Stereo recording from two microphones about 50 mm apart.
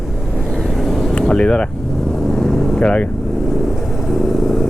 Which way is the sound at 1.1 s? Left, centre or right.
Centre.